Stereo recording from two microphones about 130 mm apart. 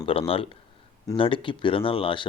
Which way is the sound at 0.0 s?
45° left (ahead or behind).